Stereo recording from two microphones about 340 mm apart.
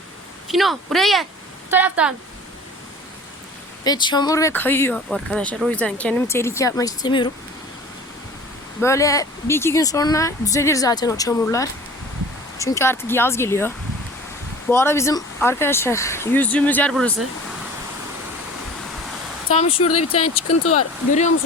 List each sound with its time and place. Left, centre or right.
0.4 s speech: centre
3.8 s speech: centre
8.8 s speech: centre
19.5 s speech: centre
19.9 s speech: left
20.7 s speech: left